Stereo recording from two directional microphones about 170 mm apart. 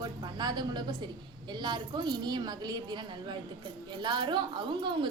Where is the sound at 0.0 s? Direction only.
25° right (ahead or behind).